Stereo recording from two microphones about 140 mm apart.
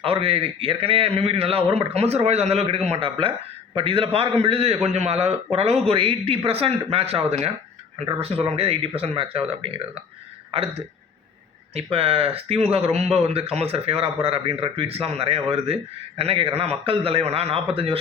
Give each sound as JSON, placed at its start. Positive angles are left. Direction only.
{"t": 0.0, "sound": "speech", "side_deg": -45}